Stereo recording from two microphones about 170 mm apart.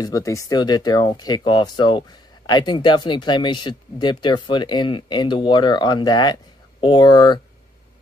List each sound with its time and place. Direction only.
0.0 s speech: 20° left (ahead or behind)